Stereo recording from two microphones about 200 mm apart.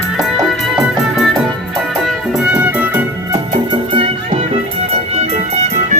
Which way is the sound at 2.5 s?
10° right (ahead or behind).